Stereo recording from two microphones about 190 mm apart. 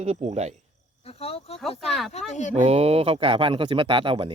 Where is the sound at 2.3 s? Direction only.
40° left (ahead or behind).